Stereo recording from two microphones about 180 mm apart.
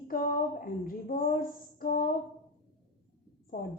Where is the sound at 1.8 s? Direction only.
50° left (ahead or behind).